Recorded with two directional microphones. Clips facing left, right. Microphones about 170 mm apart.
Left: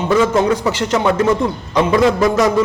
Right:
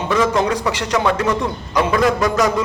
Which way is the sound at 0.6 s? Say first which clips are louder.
Left 2 dB; 25° left (ahead or behind).